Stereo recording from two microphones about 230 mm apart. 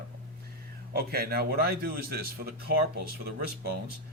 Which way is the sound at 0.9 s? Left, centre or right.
Right.